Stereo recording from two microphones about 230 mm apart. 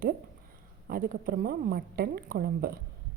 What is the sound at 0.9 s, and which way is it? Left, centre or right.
A woman's voice, right.